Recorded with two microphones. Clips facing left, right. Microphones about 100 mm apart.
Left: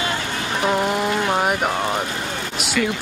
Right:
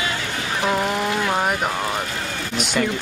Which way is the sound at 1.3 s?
5° left (ahead or behind).